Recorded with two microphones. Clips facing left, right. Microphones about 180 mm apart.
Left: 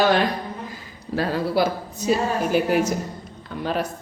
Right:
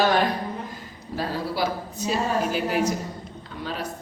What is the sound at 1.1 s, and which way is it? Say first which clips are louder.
Speech: left 6 dB; 70° left (ahead or behind).